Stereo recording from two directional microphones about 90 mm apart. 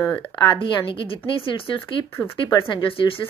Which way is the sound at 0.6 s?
70° left (ahead or behind).